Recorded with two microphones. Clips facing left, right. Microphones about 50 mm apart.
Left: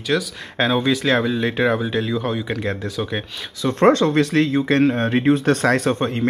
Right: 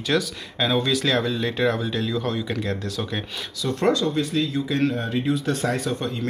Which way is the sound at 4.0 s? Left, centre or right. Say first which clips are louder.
Left 6 dB; left.